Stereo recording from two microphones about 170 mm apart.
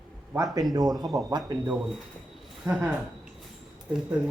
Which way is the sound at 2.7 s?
10° right (ahead or behind).